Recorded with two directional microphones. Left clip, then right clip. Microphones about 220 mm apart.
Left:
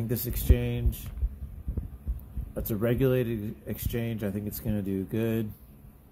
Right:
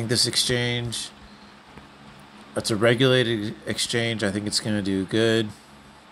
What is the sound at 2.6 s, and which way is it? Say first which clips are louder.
Speech: right 8 dB; 5° right (ahead or behind).